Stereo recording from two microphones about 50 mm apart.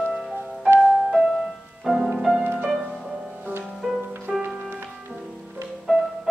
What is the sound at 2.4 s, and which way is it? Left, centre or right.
Music, right.